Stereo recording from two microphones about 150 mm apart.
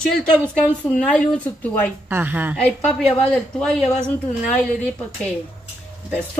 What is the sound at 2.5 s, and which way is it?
A woman's voice, 5° left (ahead or behind).